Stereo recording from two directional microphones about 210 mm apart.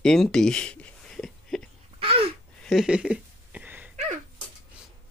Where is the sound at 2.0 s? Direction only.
25° right (ahead or behind).